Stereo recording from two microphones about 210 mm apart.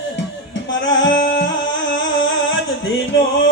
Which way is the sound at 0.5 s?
60° left (ahead or behind).